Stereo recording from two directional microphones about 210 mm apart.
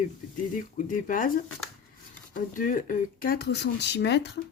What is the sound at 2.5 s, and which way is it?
Speech, 40° left (ahead or behind).